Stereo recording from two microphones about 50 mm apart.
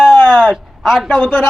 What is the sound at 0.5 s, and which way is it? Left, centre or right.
Speech, centre.